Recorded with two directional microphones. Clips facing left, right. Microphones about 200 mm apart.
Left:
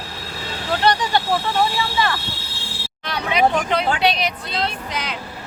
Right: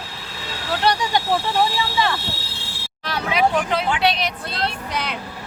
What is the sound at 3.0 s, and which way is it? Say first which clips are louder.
Speech: left 1 dB; 5° right (ahead or behind).